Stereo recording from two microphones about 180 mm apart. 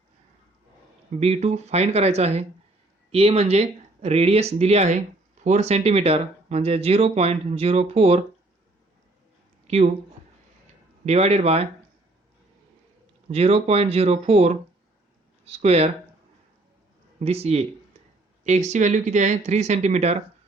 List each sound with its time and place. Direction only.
1.2 s speech: 35° right (ahead or behind)
9.6 s speech: 40° right (ahead or behind)
11.0 s speech: 35° right (ahead or behind)
13.3 s speech: 35° right (ahead or behind)
17.2 s speech: 35° right (ahead or behind)